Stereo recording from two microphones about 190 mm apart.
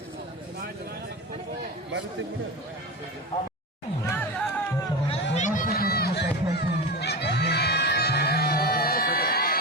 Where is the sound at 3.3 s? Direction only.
40° left (ahead or behind).